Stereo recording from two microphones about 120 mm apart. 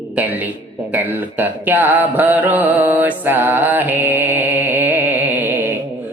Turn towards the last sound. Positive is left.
turn(degrees=-15)  # may be behind; listen again after turning